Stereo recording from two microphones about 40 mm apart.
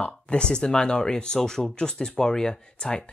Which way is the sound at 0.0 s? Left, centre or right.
Left.